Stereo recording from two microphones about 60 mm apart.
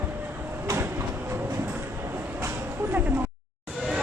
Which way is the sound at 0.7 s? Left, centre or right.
Right.